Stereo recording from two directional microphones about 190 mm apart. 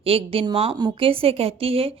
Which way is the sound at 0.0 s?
30° right (ahead or behind).